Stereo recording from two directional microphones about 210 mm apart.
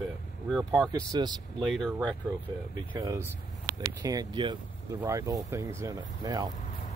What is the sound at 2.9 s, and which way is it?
Speech, 15° right (ahead or behind).